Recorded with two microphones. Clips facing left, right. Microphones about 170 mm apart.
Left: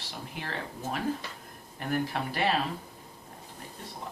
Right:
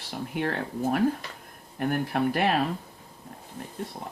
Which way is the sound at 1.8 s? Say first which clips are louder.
Right 5 dB; 55° right (ahead or behind).